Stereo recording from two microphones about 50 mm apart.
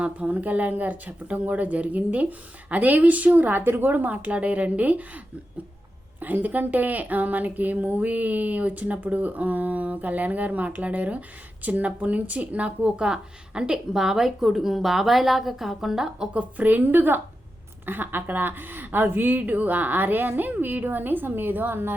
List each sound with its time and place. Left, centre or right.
0.0 s speech: right
16.3 s speech: right